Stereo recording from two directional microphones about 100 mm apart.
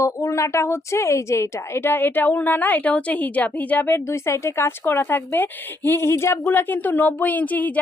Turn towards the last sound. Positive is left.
turn(degrees=15)  # may be behind; listen again after turning